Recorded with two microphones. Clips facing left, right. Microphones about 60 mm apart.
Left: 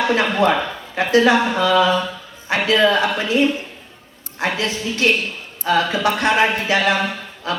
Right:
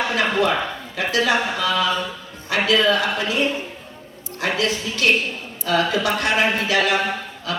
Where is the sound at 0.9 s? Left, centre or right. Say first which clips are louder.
Left 6 dB; left.